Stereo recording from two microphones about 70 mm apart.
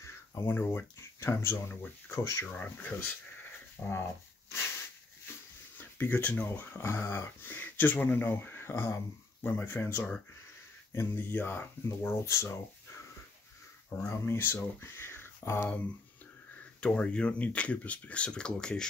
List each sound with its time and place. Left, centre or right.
0.0 s a sound: left
0.9 s speech: left
2.4 s speech: left
5.9 s speech: left
12.1 s speech: left
14.0 s speech: left
16.8 s speech: centre